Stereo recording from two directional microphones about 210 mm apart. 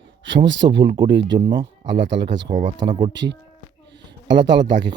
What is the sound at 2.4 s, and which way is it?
Speech, 25° right (ahead or behind).